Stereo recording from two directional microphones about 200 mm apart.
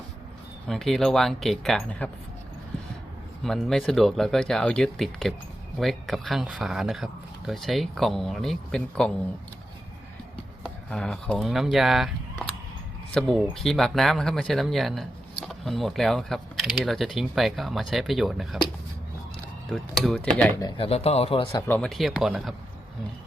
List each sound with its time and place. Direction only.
0.7 s speech: centre (ahead or behind)
3.4 s speech: centre (ahead or behind)
10.8 s speech: 5° left (ahead or behind)
19.7 s speech: centre (ahead or behind)
20.6 s speech: 25° left (ahead or behind)
21.5 s speech: 5° left (ahead or behind)